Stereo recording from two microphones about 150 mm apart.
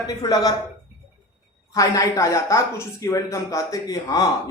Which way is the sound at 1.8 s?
20° left (ahead or behind).